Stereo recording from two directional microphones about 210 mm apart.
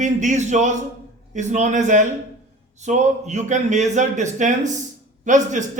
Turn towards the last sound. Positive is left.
turn(degrees=-35)  # may be behind; listen again after turning